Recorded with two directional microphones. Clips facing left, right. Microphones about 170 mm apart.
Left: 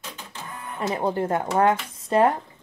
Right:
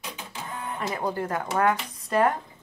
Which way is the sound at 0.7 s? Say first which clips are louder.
Left 5 dB; 25° left (ahead or behind).